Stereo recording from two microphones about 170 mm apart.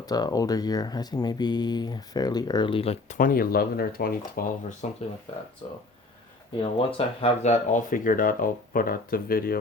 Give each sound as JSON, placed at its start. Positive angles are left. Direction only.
{"t": 0.0, "sound": "speech", "side_deg": 20}
{"t": 3.2, "sound": "speech", "side_deg": 55}
{"t": 6.6, "sound": "speech", "side_deg": 30}